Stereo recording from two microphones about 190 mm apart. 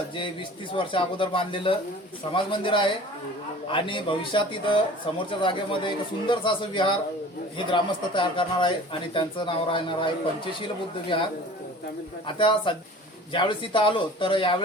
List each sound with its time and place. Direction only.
0.7 s a man's voice: 25° left (ahead or behind)